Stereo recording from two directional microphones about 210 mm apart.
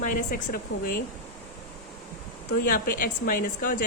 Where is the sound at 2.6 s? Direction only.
45° left (ahead or behind).